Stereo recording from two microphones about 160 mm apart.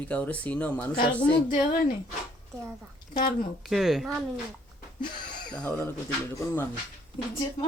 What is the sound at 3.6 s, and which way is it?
Speech, centre (ahead or behind).